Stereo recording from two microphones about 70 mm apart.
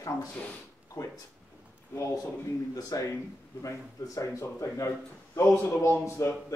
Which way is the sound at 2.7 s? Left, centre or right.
Left.